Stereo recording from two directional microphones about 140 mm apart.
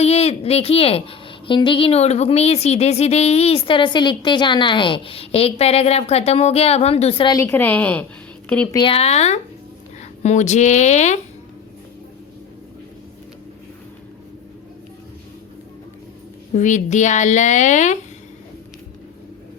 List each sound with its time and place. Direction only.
0.0 s a woman's voice: 45° left (ahead or behind)
7.3 s a woman's voice: 20° left (ahead or behind)
8.7 s a woman's voice: 40° left (ahead or behind); by 11.2 s 55° left (ahead or behind)
16.6 s a woman's voice: 60° left (ahead or behind)